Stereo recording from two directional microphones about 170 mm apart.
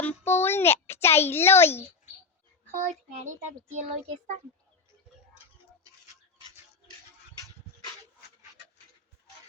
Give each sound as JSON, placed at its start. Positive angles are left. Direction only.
{"t": 0.0, "sound": "a child's voice", "side_deg": 10}
{"t": 2.7, "sound": "a child's voice", "side_deg": -45}